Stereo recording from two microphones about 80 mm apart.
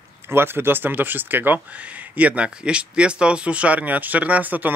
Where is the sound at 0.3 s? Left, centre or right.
Right.